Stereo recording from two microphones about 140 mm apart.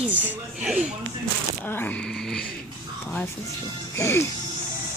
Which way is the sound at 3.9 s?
20° left (ahead or behind).